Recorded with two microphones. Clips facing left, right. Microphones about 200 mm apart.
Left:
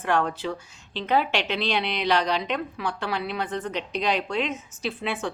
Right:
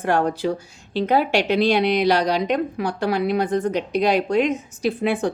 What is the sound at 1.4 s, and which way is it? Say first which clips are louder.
A woman's voice: right 8 dB; 40° right (ahead or behind).